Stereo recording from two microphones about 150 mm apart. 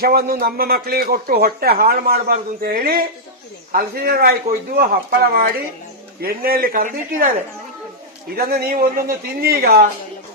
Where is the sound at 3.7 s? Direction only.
85° right.